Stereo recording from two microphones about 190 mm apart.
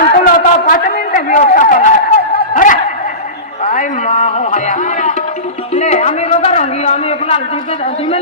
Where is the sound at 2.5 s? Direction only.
45° left (ahead or behind).